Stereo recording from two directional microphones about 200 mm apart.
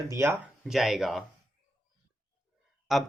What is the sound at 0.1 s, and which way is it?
Speech, 10° right (ahead or behind).